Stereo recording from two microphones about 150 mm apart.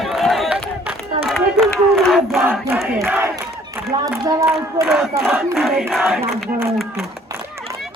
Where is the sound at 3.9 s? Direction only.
20° right (ahead or behind).